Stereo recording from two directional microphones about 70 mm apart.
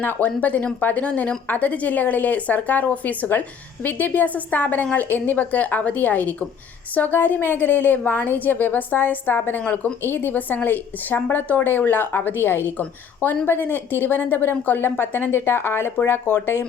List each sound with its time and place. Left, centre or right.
0.0 s speech: left
12.8 s speech: centre